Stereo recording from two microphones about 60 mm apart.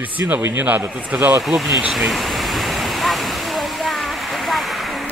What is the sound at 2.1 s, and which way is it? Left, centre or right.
Waterfall, centre.